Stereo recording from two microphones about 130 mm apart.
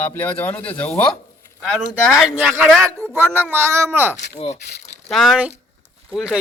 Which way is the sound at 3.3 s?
15° right (ahead or behind).